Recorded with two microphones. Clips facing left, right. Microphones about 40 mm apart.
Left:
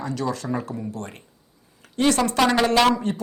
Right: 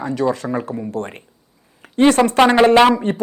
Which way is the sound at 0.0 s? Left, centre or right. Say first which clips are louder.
Right 7 dB; right.